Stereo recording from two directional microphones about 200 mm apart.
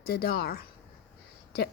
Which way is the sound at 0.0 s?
50° left (ahead or behind).